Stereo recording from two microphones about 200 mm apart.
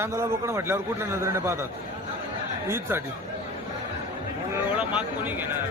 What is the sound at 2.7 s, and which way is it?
Speech, 10° right (ahead or behind).